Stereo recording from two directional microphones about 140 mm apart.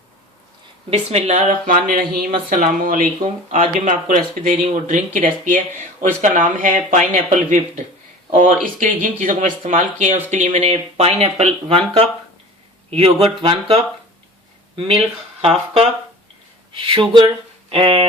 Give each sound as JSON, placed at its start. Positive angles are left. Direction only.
{"t": 0.9, "sound": "speech", "side_deg": -50}
{"t": 3.2, "sound": "speech", "side_deg": -60}
{"t": 13.2, "sound": "speech", "side_deg": -40}